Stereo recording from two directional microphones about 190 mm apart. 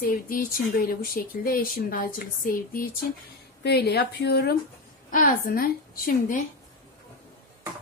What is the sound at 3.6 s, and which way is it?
Speech, 60° left (ahead or behind).